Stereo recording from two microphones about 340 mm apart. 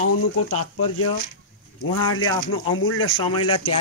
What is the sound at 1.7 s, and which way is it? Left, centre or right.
Speech, left.